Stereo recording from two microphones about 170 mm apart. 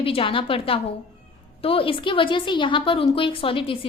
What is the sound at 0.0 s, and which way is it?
A woman's voice, 30° left (ahead or behind).